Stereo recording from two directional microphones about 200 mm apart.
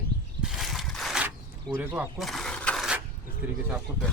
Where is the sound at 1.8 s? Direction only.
5° right (ahead or behind).